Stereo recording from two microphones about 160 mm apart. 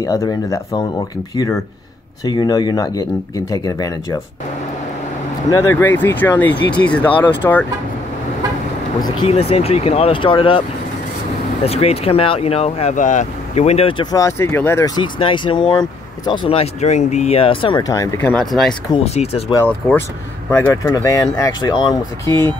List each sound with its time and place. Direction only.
0.0 s speech: 20° left (ahead or behind)
5.5 s speech: 15° left (ahead or behind)
9.3 s speech: 40° left (ahead or behind)
11.6 s speech: 40° left (ahead or behind)
14.1 s speech: 20° left (ahead or behind)
15.0 s speech: 30° left (ahead or behind)
18.3 s speech: centre (ahead or behind)
19.0 s speech: 40° left (ahead or behind)
20.5 s speech: 15° left (ahead or behind)
22.3 s speech: 15° left (ahead or behind)